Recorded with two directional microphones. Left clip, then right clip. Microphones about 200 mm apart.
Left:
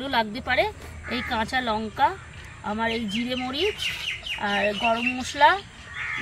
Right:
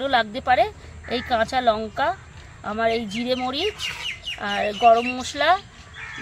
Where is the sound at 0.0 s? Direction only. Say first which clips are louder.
Right 4 dB; 60° right (ahead or behind).